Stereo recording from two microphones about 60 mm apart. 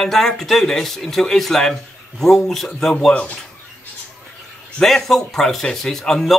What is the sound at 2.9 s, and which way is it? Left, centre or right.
Speech, centre.